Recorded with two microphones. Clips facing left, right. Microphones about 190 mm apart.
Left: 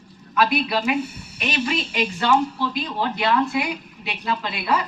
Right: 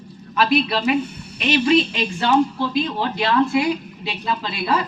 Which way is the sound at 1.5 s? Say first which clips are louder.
Right 8 dB; 25° right (ahead or behind).